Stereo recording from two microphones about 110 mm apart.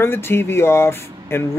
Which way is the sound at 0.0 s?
20° left (ahead or behind).